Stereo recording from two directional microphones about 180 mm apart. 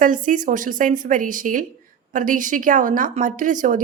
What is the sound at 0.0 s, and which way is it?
Speech, 45° right (ahead or behind).